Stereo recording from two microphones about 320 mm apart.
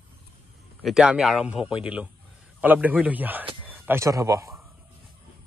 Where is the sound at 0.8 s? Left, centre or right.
Centre.